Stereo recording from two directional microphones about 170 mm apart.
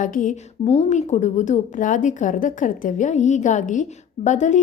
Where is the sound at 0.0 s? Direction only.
50° left (ahead or behind).